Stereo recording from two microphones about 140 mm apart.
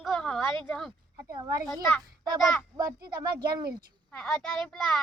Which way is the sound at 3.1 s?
30° right (ahead or behind).